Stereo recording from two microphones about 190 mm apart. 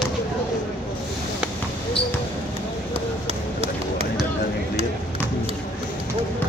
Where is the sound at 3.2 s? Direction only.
35° right (ahead or behind).